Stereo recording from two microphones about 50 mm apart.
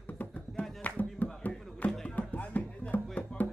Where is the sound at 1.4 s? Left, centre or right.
Left.